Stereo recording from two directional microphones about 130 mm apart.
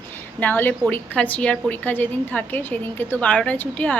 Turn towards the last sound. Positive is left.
turn(degrees=15)  # may be behind; listen again after turning